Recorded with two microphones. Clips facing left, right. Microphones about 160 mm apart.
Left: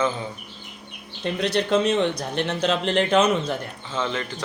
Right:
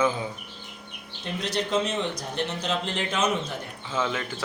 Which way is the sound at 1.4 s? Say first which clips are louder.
Left 5 dB; 65° left (ahead or behind).